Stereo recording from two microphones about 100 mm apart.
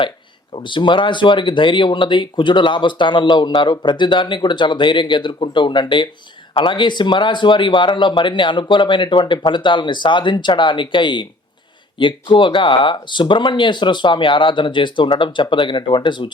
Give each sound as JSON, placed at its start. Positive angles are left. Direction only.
{"t": 0.5, "sound": "speech", "side_deg": 55}